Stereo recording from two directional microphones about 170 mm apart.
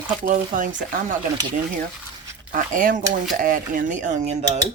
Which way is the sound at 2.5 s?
50° right (ahead or behind).